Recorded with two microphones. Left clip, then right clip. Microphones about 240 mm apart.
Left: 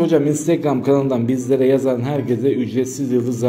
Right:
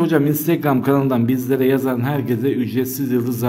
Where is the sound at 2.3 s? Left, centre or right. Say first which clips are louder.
Left 4 dB; right.